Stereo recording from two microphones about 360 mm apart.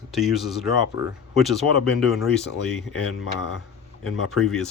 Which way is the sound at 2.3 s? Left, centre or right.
Centre.